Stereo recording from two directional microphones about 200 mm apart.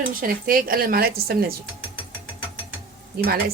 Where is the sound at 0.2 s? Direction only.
45° right (ahead or behind).